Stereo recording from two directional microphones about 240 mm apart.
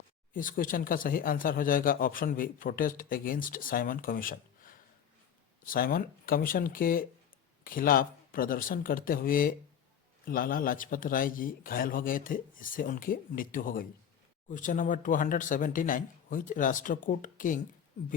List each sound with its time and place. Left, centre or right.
0.3 s a man's voice: left